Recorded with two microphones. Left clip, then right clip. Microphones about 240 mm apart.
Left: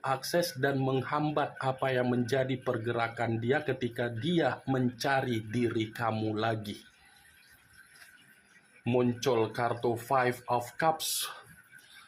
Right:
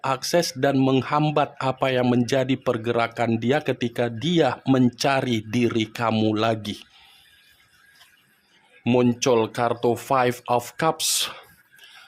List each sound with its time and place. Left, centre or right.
0.0 s speech: right
8.8 s speech: right